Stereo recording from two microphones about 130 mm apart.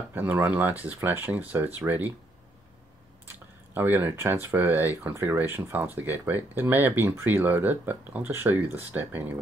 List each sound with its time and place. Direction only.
0.1 s speech: 15° right (ahead or behind)
3.7 s speech: 15° right (ahead or behind)